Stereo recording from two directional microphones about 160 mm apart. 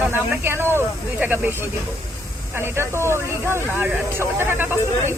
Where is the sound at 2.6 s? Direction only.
15° right (ahead or behind).